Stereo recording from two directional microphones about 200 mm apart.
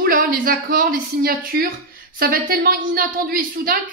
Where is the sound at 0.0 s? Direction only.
45° right (ahead or behind).